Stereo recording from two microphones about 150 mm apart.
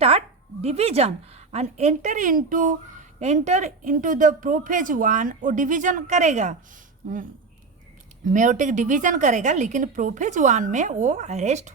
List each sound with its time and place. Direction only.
0.6 s a woman's voice: 45° right (ahead or behind); by 7.2 s 60° right (ahead or behind)
8.2 s a woman's voice: 60° right (ahead or behind)